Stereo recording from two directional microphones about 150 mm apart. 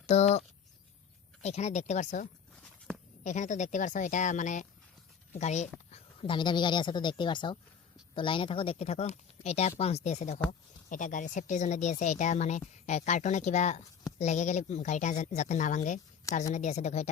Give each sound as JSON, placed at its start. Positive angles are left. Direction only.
{"t": 0.1, "sound": "speech", "side_deg": 45}
{"t": 3.2, "sound": "speech", "side_deg": 55}
{"t": 5.9, "sound": "a woman's voice", "side_deg": 35}